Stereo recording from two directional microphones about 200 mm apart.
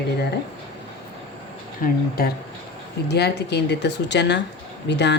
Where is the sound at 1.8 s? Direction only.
50° left (ahead or behind).